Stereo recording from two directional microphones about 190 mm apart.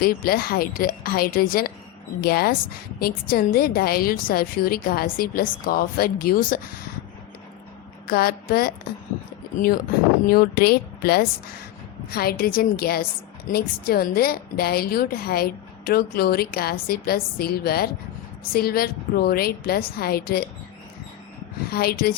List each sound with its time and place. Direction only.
0.0 s a woman's voice: 50° left (ahead or behind)
8.0 s a woman's voice: 50° left (ahead or behind)
21.7 s a woman's voice: 55° left (ahead or behind)